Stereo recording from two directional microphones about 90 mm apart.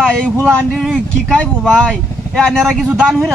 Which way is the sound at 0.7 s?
5° left (ahead or behind).